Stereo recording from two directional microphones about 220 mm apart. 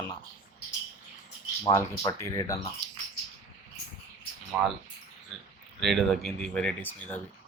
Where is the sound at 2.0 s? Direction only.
10° left (ahead or behind).